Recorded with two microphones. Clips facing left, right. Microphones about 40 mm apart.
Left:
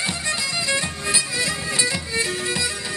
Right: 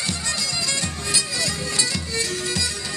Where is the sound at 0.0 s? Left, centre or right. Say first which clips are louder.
Left 2 dB; centre.